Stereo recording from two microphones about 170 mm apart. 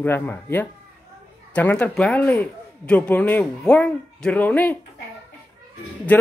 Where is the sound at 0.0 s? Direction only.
10° left (ahead or behind).